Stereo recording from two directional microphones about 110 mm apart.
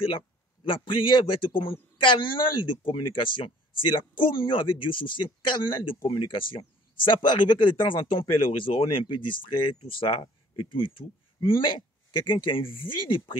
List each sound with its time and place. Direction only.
0.7 s speech: 50° left (ahead or behind)